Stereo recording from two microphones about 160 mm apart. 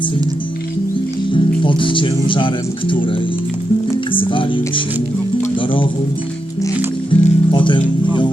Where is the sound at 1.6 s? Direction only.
30° left (ahead or behind).